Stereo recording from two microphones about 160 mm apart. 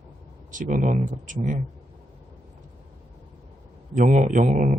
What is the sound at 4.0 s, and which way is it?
Speech, 50° right (ahead or behind).